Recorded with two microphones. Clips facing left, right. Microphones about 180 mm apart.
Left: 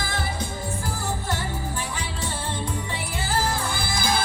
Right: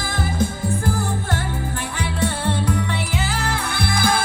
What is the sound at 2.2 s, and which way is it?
Music, 70° right (ahead or behind).